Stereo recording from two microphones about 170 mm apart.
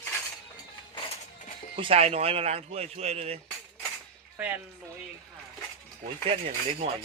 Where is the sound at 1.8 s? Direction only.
35° right (ahead or behind).